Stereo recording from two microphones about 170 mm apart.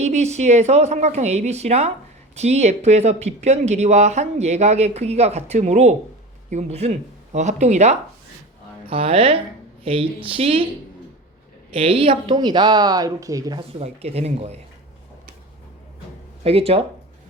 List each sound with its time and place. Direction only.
0.0 s a woman's voice: 40° right (ahead or behind)
11.7 s speech: 35° right (ahead or behind)
13.6 s speech: 35° right (ahead or behind)
16.4 s speech: 35° right (ahead or behind)